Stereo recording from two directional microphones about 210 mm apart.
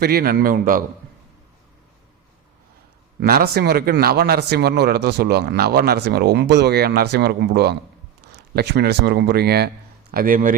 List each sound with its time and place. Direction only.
0.0 s speech: 45° right (ahead or behind)
3.2 s speech: 50° right (ahead or behind)